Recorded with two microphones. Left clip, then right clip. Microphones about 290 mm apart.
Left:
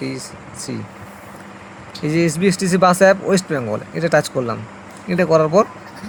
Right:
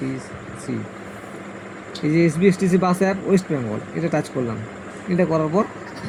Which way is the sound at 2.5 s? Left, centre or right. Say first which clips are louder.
Left 6 dB; left.